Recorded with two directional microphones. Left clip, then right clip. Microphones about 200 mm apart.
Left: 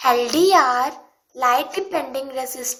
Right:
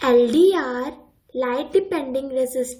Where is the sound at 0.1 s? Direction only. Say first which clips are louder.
Even; 60° left (ahead or behind).